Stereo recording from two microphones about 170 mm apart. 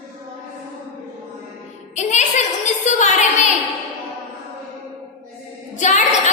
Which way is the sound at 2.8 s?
45° left (ahead or behind).